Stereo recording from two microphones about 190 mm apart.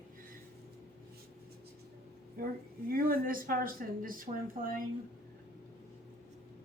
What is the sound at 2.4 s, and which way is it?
Speech, 50° right (ahead or behind).